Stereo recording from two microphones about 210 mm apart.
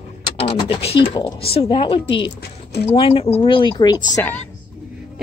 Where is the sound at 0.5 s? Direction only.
25° left (ahead or behind).